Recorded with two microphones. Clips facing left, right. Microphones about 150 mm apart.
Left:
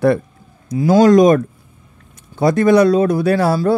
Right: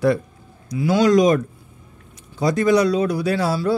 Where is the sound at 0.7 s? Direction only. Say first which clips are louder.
Left 6 dB; 45° left (ahead or behind).